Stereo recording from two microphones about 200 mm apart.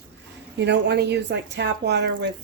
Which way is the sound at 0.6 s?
60° right (ahead or behind).